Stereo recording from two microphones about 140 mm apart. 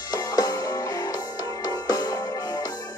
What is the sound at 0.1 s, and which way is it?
Music, 25° left (ahead or behind).